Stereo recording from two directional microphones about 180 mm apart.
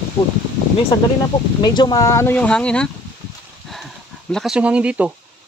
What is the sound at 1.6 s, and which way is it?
Speech, 25° left (ahead or behind).